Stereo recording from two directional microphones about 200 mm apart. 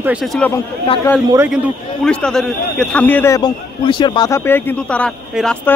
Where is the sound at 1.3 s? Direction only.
10° right (ahead or behind).